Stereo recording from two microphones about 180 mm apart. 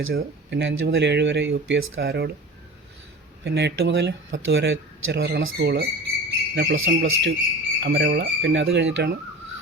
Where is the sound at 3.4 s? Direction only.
70° right (ahead or behind).